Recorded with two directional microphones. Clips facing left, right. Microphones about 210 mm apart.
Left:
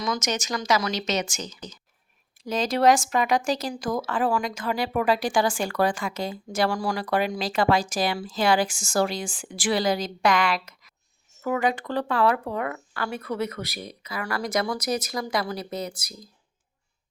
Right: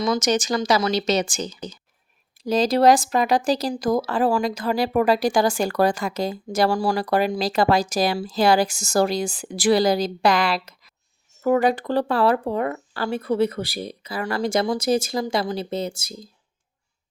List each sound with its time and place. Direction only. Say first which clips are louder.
0.0 s speech: right 7 dB; 30° right (ahead or behind)